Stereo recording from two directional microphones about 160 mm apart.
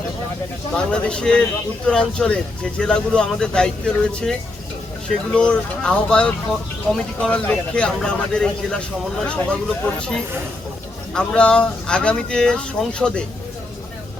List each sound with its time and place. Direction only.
0.7 s speech: 5° left (ahead or behind)
11.1 s speech: 5° left (ahead or behind)